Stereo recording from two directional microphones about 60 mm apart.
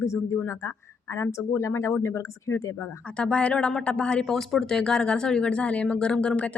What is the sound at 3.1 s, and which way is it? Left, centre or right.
A woman's voice, centre.